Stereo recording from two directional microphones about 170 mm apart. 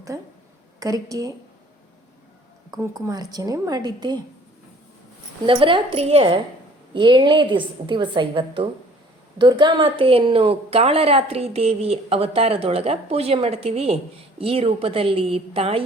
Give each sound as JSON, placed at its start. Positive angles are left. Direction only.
{"t": 0.1, "sound": "a woman's voice", "side_deg": -20}
{"t": 2.6, "sound": "a woman's voice", "side_deg": -20}
{"t": 5.5, "sound": "a woman's voice", "side_deg": -30}